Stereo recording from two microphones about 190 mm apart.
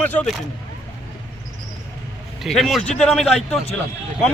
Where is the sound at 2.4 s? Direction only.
Centre (ahead or behind).